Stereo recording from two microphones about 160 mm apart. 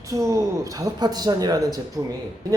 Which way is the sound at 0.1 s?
20° right (ahead or behind).